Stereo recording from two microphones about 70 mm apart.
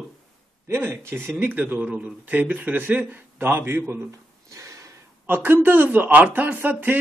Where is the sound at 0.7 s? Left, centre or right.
Right.